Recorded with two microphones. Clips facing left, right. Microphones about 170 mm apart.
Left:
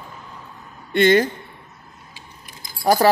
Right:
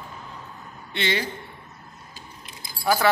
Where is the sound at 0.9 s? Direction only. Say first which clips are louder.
Left 12 dB; 50° left (ahead or behind).